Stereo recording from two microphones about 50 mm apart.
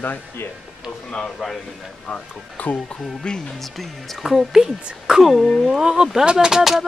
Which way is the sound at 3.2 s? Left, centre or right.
Centre.